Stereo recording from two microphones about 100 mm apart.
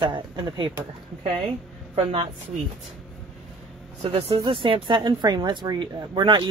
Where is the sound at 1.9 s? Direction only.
65° right (ahead or behind).